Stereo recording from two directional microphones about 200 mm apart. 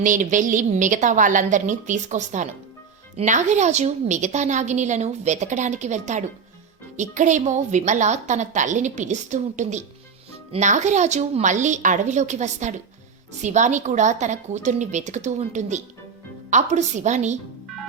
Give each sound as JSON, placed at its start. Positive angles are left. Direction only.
{"t": 0.0, "sound": "a woman's voice", "side_deg": -40}